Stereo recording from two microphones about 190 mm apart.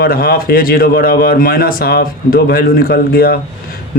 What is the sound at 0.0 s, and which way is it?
A man's voice, 55° left (ahead or behind).